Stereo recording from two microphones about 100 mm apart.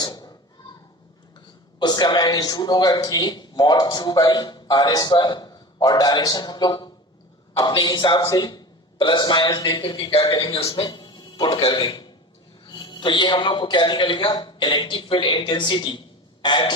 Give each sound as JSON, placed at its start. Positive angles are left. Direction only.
{"t": 0.0, "sound": "a sound", "side_deg": 40}
{"t": 1.8, "sound": "a man's voice", "side_deg": 45}
{"t": 10.8, "sound": "music", "side_deg": 50}
{"t": 11.5, "sound": "a man's voice", "side_deg": 50}
{"t": 11.9, "sound": "a sound", "side_deg": 50}
{"t": 12.6, "sound": "a man's voice", "side_deg": 50}